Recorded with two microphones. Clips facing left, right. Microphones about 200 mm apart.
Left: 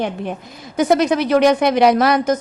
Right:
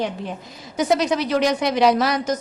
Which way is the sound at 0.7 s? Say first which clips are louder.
Left 4 dB; 55° left (ahead or behind).